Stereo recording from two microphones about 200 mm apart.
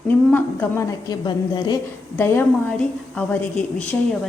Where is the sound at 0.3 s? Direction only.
10° left (ahead or behind).